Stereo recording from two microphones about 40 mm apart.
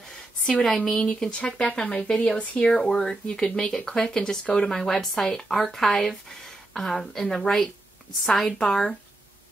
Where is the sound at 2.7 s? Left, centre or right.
Centre.